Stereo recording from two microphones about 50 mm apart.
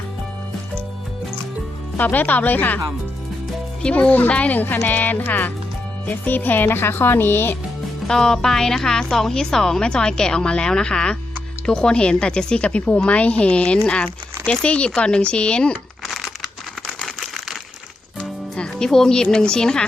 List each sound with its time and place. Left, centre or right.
2.0 s speech: left
3.8 s a woman's voice: centre
4.6 s speech: left
8.0 s a woman's voice: centre
16.0 s crumpling: centre
16.8 s a sound: centre
17.2 s a sound: centre
18.2 s music: centre